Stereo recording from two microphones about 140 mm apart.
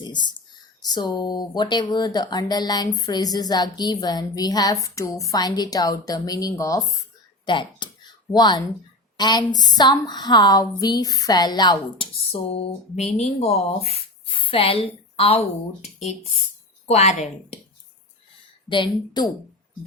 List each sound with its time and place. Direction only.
0.0 s a sound: 30° left (ahead or behind)
0.9 s a woman's voice: 30° left (ahead or behind)
7.4 s a woman's voice: 35° left (ahead or behind)
13.0 s speech: 50° left (ahead or behind)
16.8 s a woman's voice: 50° left (ahead or behind)
18.7 s speech: 35° left (ahead or behind)